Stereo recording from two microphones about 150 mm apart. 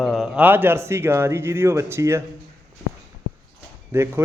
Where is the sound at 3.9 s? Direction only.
20° right (ahead or behind).